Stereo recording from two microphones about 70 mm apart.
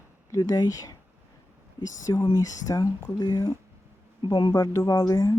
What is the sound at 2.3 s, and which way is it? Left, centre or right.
Speech, left.